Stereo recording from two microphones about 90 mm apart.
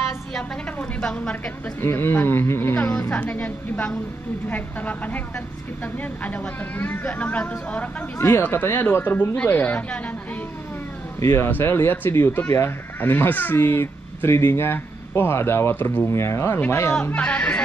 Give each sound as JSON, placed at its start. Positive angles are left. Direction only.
{"t": 0.7, "sound": "a woman's voice", "side_deg": 10}
{"t": 1.8, "sound": "speech", "side_deg": 25}
{"t": 8.2, "sound": "speech", "side_deg": 30}
{"t": 11.1, "sound": "speech", "side_deg": 35}
{"t": 17.0, "sound": "speech", "side_deg": 15}